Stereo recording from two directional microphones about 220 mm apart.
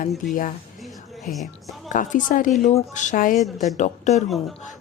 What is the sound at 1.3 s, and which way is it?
Speech, 40° left (ahead or behind).